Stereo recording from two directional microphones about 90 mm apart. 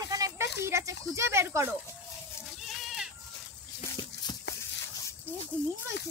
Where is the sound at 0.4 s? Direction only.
30° right (ahead or behind).